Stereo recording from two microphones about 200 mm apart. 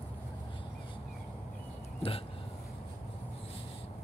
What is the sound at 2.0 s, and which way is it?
Speech, 30° left (ahead or behind).